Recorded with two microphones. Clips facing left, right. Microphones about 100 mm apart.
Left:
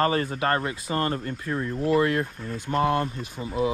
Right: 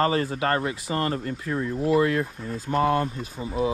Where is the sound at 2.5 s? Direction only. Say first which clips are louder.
Right 1 dB; 35° right (ahead or behind).